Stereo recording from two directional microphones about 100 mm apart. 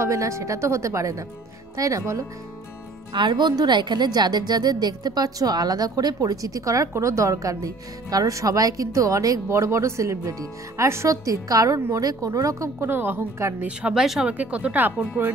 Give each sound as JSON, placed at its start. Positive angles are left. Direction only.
{"t": 0.0, "sound": "a woman's voice", "side_deg": -30}
{"t": 3.1, "sound": "a woman's voice", "side_deg": -50}
{"t": 12.9, "sound": "a woman's voice", "side_deg": -20}
{"t": 13.6, "sound": "speech", "side_deg": -10}